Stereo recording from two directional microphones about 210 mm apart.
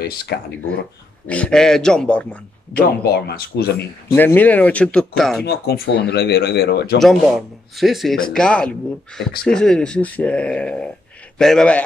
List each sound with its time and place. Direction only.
0.3 s speech: 50° left (ahead or behind)
1.2 s speech: 5° left (ahead or behind)
3.0 s speech: 50° left (ahead or behind)
4.1 s speech: 10° left (ahead or behind)
5.4 s speech: 50° left (ahead or behind)
7.0 s speech: centre (ahead or behind)